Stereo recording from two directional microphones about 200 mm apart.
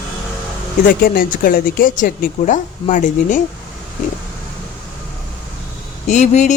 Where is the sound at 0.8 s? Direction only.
45° left (ahead or behind).